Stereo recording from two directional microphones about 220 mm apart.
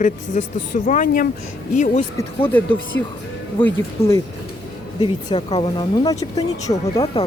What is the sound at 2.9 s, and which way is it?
Speech, 55° left (ahead or behind).